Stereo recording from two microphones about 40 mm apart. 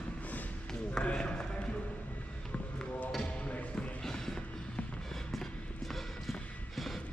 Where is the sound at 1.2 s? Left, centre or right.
Left.